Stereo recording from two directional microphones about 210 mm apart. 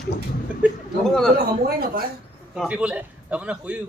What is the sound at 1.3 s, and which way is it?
Speech, 45° right (ahead or behind).